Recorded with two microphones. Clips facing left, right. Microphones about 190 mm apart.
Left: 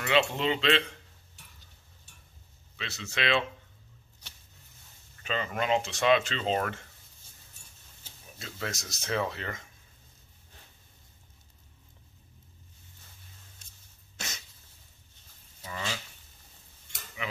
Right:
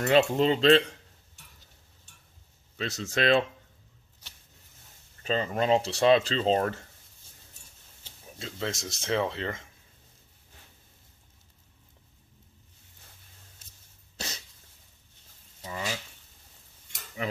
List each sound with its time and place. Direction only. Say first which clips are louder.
0.0 s speech: right 5 dB; 40° right (ahead or behind)
2.8 s speech: right 6 dB; 45° right (ahead or behind)
5.2 s speech: right 4 dB; 35° right (ahead or behind)
8.4 s speech: right 4 dB; 25° right (ahead or behind)
13.6 s a sound: right 1 dB; 5° right (ahead or behind)
14.1 s dog: right 3 dB; 35° right (ahead or behind)
15.7 s a sound: right 2 dB; 15° right (ahead or behind)
17.2 s cutlery: right 5 dB; 40° right (ahead or behind)